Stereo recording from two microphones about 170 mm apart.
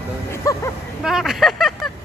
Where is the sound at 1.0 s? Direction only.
Centre (ahead or behind).